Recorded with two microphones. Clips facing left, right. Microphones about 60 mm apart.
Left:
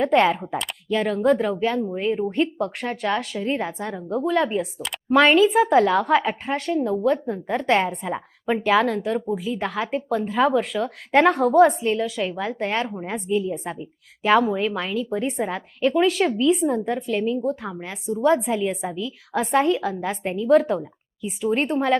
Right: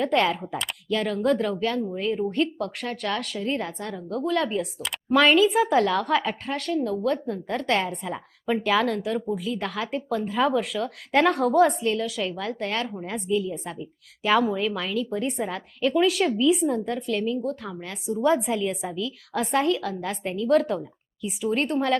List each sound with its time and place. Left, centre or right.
0.0 s a woman's voice: centre
6.6 s speech: centre
7.4 s a woman's voice: centre
8.6 s a woman's voice: centre
11.8 s a woman's voice: centre
12.0 s a woman's voice: centre
12.3 s a woman's voice: centre
18.0 s a woman's voice: centre